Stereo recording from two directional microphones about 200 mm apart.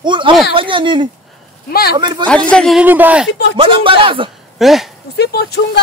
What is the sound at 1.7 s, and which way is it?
Speech, 50° left (ahead or behind).